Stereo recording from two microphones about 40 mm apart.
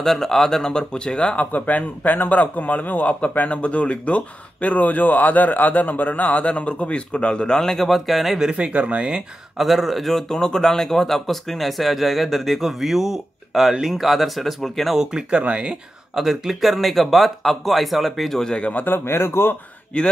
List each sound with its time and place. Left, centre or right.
0.0 s speech: centre
1.4 s a man's voice: left; by 7.9 s centre
7.9 s speech: centre
8.4 s speech: right
9.6 s speech: centre
10.3 s speech: centre
15.3 s speech: right
15.7 s speech: centre
18.9 s a man's voice: left
19.9 s speech: left